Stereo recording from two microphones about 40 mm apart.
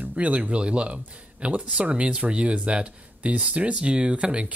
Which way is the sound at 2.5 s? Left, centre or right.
Right.